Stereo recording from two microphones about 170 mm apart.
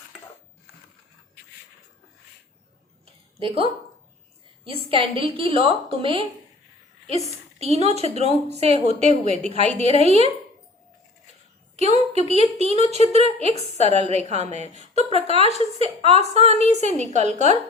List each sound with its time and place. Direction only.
3.4 s a woman's voice: 35° right (ahead or behind)
4.7 s a woman's voice: 30° right (ahead or behind)
11.8 s a woman's voice: 40° right (ahead or behind)